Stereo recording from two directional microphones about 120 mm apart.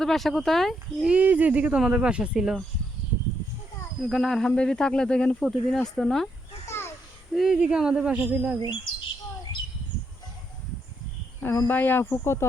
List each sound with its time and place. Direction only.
0.0 s speech: 5° left (ahead or behind)
1.1 s speech: 15° right (ahead or behind)
4.0 s speech: 5° left (ahead or behind)
6.7 s a sound: 20° left (ahead or behind)
7.3 s speech: 5° right (ahead or behind)
11.3 s a sound: 20° left (ahead or behind)
11.7 s speech: 15° left (ahead or behind)